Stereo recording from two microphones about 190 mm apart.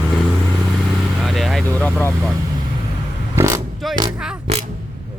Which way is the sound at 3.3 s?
15° right (ahead or behind).